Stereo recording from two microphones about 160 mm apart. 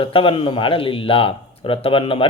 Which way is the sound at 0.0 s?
35° left (ahead or behind).